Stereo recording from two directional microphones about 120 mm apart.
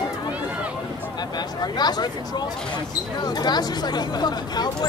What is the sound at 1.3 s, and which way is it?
Speech, 35° left (ahead or behind).